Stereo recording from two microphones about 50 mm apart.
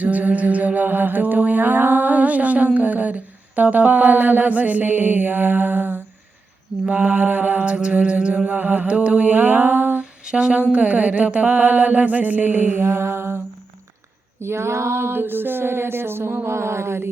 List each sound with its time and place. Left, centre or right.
0.0 s music: right
6.9 s mantra: right
8.4 s music: right
10.0 s a sound: centre
10.7 s music: right
14.4 s a sound: right